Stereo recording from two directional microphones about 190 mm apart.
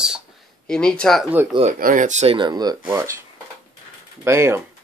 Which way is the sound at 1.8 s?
45° right (ahead or behind).